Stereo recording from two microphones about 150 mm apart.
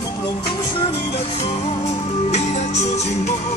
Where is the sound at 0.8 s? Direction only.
40° left (ahead or behind).